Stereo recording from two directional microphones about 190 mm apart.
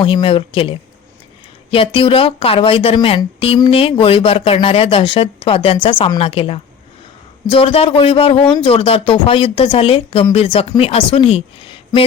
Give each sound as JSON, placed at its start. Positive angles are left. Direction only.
{"t": 0.0, "sound": "speech", "side_deg": 25}